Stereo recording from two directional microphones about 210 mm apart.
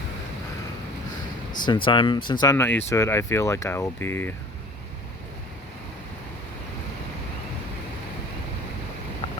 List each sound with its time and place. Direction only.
1.6 s speech: 25° left (ahead or behind)